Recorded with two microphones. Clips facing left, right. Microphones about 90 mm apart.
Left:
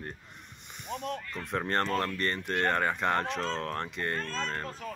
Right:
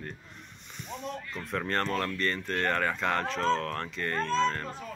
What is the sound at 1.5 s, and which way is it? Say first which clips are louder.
Speech: left 1 dB; 20° left (ahead or behind).